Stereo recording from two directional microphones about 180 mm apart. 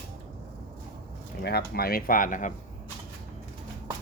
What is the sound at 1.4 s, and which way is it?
Speech, 60° left (ahead or behind).